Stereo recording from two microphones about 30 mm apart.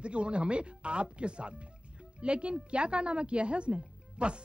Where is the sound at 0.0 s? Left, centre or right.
Right.